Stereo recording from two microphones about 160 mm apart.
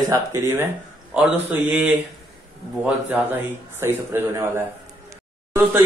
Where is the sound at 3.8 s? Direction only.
15° right (ahead or behind).